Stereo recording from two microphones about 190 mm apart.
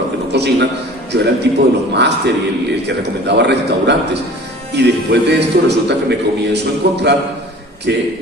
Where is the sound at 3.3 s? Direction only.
65° right (ahead or behind).